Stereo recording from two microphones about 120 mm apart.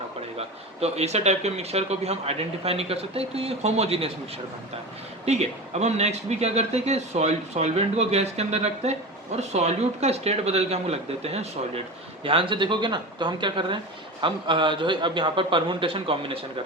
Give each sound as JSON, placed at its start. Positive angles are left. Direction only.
{"t": 0.3, "sound": "a man's voice", "side_deg": -60}
{"t": 5.2, "sound": "a man's voice", "side_deg": -65}
{"t": 12.2, "sound": "a man's voice", "side_deg": -50}